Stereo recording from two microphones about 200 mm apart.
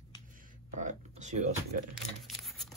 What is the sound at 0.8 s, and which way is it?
Speech, 35° right (ahead or behind).